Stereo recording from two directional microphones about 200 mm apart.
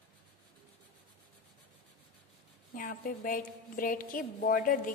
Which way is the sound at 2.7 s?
45° left (ahead or behind).